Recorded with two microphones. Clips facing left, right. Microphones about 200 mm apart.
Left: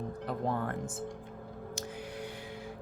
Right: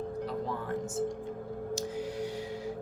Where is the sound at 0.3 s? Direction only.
55° left (ahead or behind).